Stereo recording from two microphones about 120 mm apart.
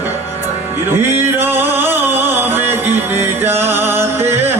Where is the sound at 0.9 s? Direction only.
20° right (ahead or behind).